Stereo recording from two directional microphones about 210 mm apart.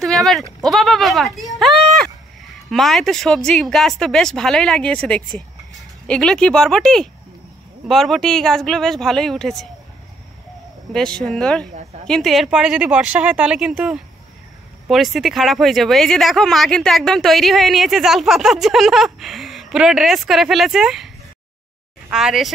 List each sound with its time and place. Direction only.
0.0 s speech: centre (ahead or behind)
1.6 s a sound: centre (ahead or behind)
2.7 s speech: centre (ahead or behind)
10.9 s speech: 5° left (ahead or behind)
22.1 s speech: centre (ahead or behind)